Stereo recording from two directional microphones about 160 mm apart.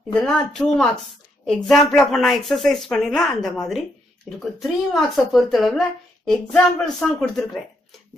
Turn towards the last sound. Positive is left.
turn(degrees=5)  # may be behind; listen again after turning